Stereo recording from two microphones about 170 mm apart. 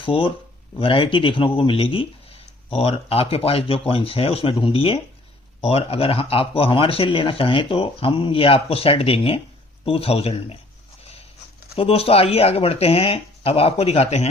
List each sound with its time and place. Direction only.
0.0 s speech: 30° left (ahead or behind)
11.8 s speech: 35° left (ahead or behind)